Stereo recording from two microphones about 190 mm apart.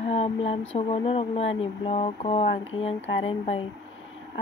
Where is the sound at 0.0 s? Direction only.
30° left (ahead or behind).